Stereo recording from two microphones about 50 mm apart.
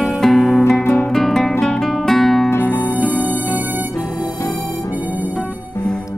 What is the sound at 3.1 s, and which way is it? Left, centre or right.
Music, right.